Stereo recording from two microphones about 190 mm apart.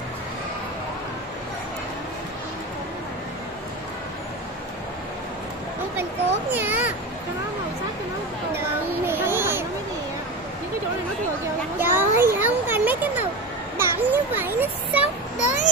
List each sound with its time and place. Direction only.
6.5 s a child's voice: 10° right (ahead or behind)
8.5 s a sound: 10° right (ahead or behind)
11.8 s children playing: 10° right (ahead or behind)
13.7 s a child's voice: 10° right (ahead or behind)
15.3 s music: 40° left (ahead or behind)